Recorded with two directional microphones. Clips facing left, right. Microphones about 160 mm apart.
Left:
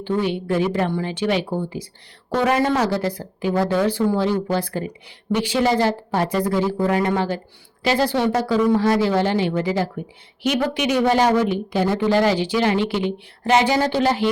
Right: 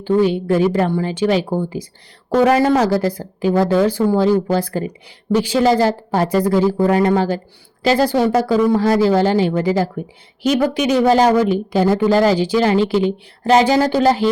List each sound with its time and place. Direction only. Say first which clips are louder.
0.0 s speech: right 7 dB; 40° right (ahead or behind)